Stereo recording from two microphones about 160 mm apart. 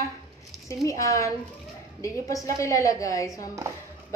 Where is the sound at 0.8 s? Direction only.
20° left (ahead or behind).